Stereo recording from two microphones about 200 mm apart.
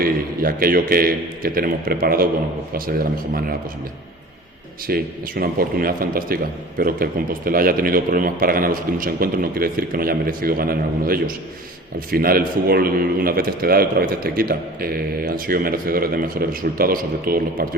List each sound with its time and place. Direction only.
0.0 s a man's voice: 45° right (ahead or behind)
4.9 s a man's voice: 50° right (ahead or behind)